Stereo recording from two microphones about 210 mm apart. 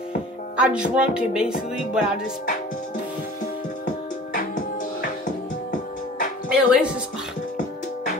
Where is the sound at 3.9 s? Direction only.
40° left (ahead or behind).